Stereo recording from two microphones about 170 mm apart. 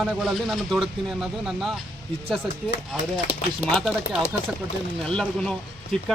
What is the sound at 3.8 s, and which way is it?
Speech, centre (ahead or behind).